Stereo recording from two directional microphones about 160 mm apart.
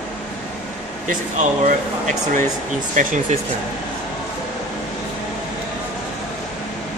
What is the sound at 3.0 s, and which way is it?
Speech, 55° right (ahead or behind).